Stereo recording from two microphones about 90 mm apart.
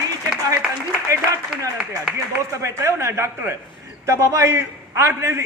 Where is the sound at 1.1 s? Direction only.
35° right (ahead or behind).